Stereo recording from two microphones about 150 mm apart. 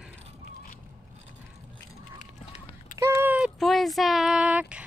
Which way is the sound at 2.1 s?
55° left (ahead or behind).